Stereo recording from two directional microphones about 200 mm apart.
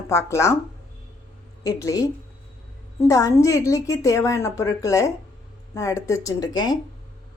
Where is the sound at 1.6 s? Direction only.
15° left (ahead or behind).